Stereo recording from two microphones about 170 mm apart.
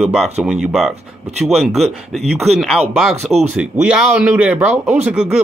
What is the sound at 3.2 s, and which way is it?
Speech, 40° right (ahead or behind).